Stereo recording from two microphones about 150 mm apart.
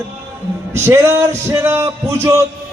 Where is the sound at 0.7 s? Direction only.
20° right (ahead or behind).